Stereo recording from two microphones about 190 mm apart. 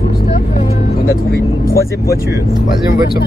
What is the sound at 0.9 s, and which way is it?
Speech, 55° left (ahead or behind).